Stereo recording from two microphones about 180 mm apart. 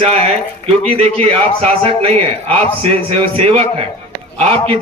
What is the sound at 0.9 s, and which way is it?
A man's voice, 35° right (ahead or behind).